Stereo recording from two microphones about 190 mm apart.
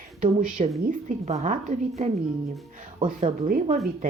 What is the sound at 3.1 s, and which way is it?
Speech, 40° right (ahead or behind).